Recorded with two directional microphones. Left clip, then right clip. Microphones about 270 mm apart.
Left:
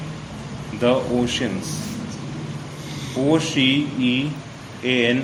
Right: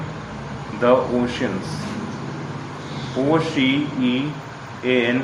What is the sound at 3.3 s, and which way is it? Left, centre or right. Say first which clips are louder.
Speech: left 1 dB; left.